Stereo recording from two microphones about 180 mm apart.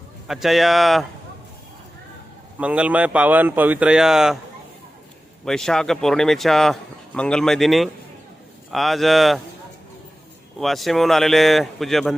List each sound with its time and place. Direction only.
0.3 s a man's voice: centre (ahead or behind)
2.6 s speech: 5° right (ahead or behind)
5.5 s a man's voice: centre (ahead or behind)
10.6 s a man's voice: centre (ahead or behind)